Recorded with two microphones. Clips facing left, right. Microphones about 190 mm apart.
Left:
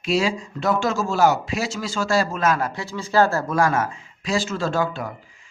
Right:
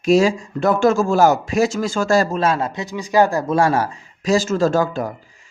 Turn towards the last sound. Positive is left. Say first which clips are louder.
# right 6 dB
turn(degrees=-40)  # may be behind; listen again after turning